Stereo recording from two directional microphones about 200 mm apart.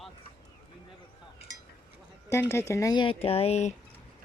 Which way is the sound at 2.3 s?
10° left (ahead or behind).